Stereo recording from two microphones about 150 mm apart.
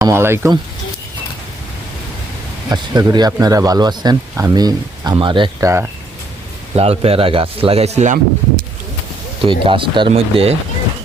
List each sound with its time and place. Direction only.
0.0 s speech: 15° right (ahead or behind)
2.6 s speech: 25° right (ahead or behind)
5.5 s speech: 20° right (ahead or behind)
6.7 s speech: 40° right (ahead or behind)
9.4 s speech: 35° right (ahead or behind)